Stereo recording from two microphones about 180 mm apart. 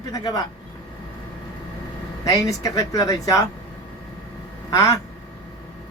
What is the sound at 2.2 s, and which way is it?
Speech, 20° left (ahead or behind).